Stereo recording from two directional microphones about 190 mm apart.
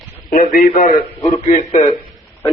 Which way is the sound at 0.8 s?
40° left (ahead or behind).